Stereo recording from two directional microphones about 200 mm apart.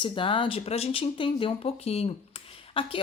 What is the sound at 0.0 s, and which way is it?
Speech, 25° left (ahead or behind).